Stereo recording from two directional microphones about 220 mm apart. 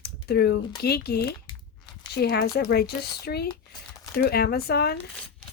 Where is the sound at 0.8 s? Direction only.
45° left (ahead or behind).